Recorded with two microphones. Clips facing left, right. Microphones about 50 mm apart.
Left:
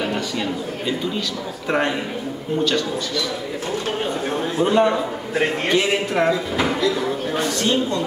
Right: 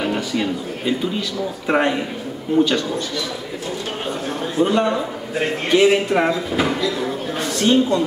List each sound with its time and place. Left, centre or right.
0.0 s a man's voice: centre
4.6 s speech: centre
5.7 s speech: centre